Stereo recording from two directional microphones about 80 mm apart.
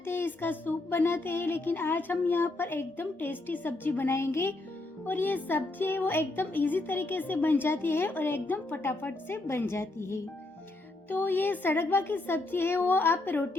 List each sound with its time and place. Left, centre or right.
0.0 s a woman's voice: left